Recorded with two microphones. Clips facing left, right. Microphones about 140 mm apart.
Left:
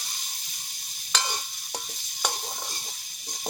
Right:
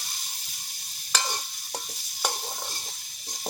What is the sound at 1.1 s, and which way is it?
Stir, centre (ahead or behind).